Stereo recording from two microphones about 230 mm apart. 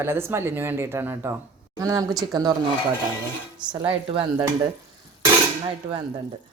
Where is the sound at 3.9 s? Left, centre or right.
Right.